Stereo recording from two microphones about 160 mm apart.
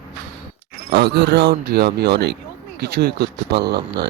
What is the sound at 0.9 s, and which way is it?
Speech, 90° right.